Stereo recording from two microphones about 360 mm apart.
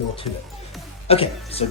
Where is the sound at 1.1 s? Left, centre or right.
Centre.